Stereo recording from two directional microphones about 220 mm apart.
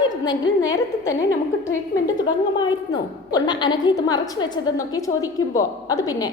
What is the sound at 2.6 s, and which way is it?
A woman's voice, 20° left (ahead or behind).